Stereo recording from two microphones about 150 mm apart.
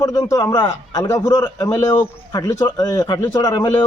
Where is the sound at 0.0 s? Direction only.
25° left (ahead or behind).